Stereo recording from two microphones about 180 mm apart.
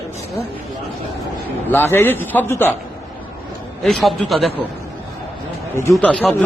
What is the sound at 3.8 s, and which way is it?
Speech, centre (ahead or behind).